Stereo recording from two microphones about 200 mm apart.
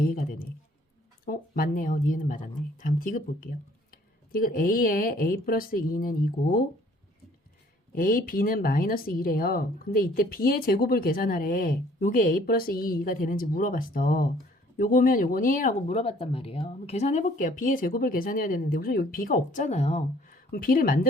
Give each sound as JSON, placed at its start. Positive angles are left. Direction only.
{"t": 0.0, "sound": "speech", "side_deg": 45}
{"t": 7.9, "sound": "speech", "side_deg": 45}
{"t": 20.5, "sound": "speech", "side_deg": 45}